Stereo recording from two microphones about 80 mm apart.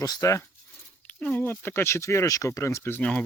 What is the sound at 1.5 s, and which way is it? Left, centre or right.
Speech, left.